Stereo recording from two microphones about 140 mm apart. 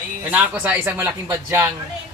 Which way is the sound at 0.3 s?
10° right (ahead or behind).